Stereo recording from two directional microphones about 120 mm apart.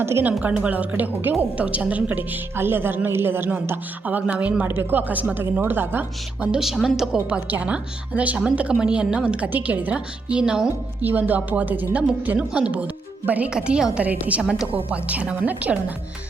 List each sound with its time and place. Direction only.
0.0 s a woman's voice: 20° right (ahead or behind)